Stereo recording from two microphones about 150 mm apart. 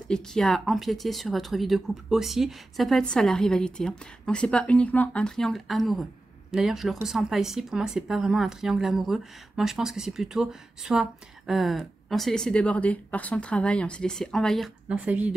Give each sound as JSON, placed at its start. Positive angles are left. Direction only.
{"t": 0.1, "sound": "speech", "side_deg": 5}
{"t": 14.9, "sound": "speech", "side_deg": -10}